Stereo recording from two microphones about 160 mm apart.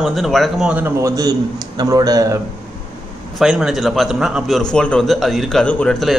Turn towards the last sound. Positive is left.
turn(degrees=5)  # may be behind; listen again after turning